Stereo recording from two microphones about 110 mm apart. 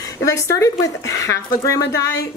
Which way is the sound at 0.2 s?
30° left (ahead or behind).